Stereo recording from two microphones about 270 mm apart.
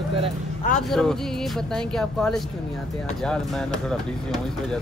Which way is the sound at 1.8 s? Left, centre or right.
Centre.